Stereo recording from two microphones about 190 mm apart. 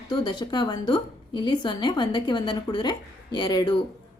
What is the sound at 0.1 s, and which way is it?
A woman's voice, 20° left (ahead or behind).